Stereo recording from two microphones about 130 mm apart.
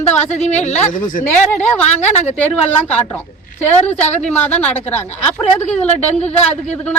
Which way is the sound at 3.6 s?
55° left (ahead or behind).